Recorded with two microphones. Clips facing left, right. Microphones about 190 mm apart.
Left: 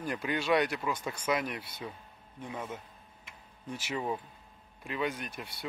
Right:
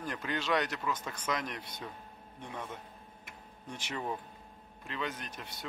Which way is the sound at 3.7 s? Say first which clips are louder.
Left 3 dB; 5° left (ahead or behind).